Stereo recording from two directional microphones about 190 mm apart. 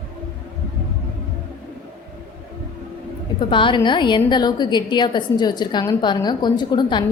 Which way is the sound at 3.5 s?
25° left (ahead or behind).